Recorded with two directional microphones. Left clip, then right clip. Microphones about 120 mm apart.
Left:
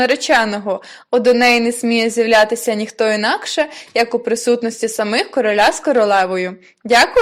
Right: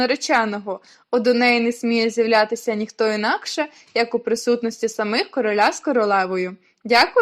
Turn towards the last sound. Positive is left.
turn(degrees=45)  # may be behind; listen again after turning